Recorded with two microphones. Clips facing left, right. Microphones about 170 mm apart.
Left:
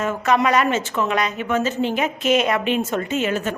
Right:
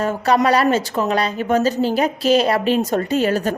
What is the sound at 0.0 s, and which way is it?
A woman's voice, 35° right (ahead or behind).